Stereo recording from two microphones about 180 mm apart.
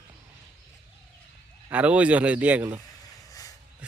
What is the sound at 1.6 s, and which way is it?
Speech, 10° right (ahead or behind).